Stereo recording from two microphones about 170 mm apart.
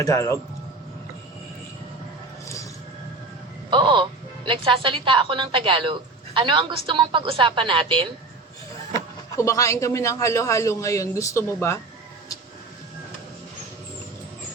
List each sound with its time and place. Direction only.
0.0 s speech: 20° left (ahead or behind)
3.7 s a woman's voice: 30° right (ahead or behind)
9.3 s a man's voice: 20° left (ahead or behind)